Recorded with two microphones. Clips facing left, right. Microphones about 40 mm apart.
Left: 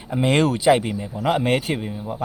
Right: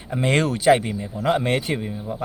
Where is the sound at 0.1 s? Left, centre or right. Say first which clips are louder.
Left 2 dB; centre.